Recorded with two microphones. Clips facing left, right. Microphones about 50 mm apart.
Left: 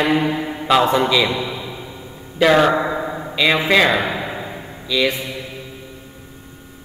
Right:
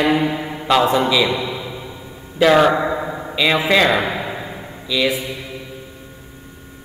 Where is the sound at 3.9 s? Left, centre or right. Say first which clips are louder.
Right 1 dB; right.